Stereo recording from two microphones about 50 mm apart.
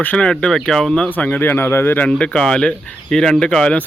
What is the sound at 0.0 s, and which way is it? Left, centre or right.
Speech, left.